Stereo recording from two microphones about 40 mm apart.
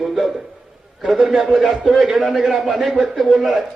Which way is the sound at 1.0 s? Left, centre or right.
Centre.